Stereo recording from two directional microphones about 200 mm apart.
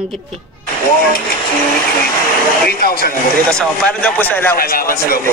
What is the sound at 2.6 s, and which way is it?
Speech, 50° left (ahead or behind).